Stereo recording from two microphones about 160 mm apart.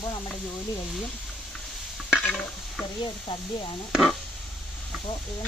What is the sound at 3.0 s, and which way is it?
Stir, 30° left (ahead or behind).